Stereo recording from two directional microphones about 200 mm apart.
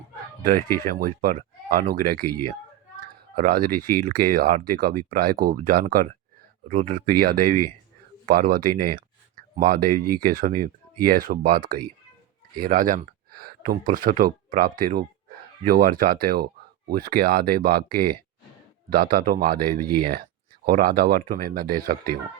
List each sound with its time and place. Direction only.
0.9 s speech: 45° right (ahead or behind)